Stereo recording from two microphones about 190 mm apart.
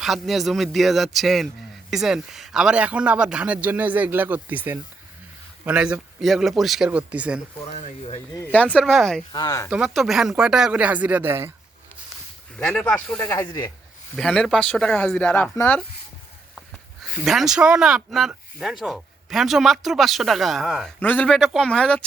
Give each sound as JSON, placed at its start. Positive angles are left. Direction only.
{"t": 0.0, "sound": "a man's voice", "side_deg": 0}
{"t": 7.8, "sound": "speech", "side_deg": 35}
{"t": 8.5, "sound": "speech", "side_deg": 5}
{"t": 9.3, "sound": "speech", "side_deg": 20}
{"t": 9.6, "sound": "speech", "side_deg": -5}
{"t": 12.5, "sound": "speech", "side_deg": 5}
{"t": 14.2, "sound": "speech", "side_deg": 0}